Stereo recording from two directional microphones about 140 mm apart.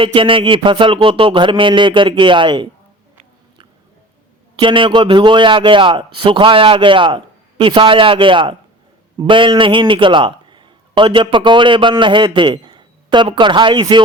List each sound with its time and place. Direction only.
0.0 s speech: 40° right (ahead or behind)
4.5 s a man's voice: 35° right (ahead or behind)